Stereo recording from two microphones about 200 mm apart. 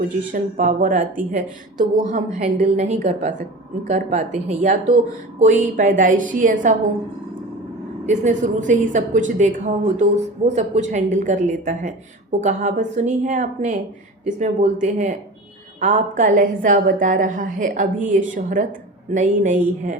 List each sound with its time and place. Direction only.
0.3 s a woman's voice: 40° right (ahead or behind)
8.0 s a woman's voice: 35° right (ahead or behind)